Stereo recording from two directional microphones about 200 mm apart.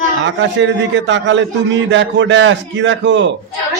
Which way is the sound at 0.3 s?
65° right (ahead or behind).